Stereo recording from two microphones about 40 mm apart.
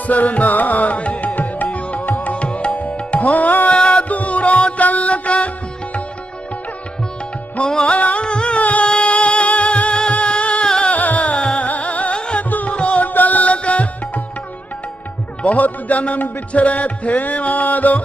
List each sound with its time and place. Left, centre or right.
0.0 s music: left
2.0 s music: left
2.3 s music: left
2.7 s music: left
3.7 s music: left
4.1 s music: left
7.6 s music: left
7.9 s music: left
8.8 s music: left
12.4 s music: left
12.7 s music: left
13.0 s music: left
15.4 s music: left